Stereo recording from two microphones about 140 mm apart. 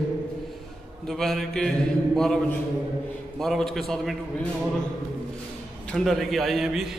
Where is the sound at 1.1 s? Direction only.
Centre (ahead or behind).